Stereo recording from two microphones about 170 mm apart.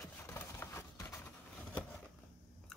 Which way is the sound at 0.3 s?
15° left (ahead or behind).